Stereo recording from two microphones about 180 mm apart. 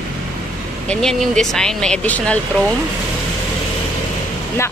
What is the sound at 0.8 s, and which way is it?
Speech, 5° left (ahead or behind).